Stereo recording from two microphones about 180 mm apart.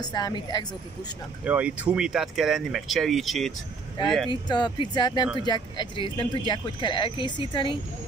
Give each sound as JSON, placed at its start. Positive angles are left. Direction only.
{"t": 0.0, "sound": "speech", "side_deg": 25}
{"t": 1.4, "sound": "speech", "side_deg": -10}
{"t": 4.3, "sound": "speech", "side_deg": 25}